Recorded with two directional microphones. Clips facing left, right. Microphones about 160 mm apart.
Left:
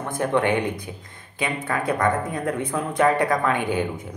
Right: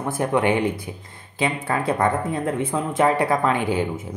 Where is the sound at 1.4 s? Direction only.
25° right (ahead or behind).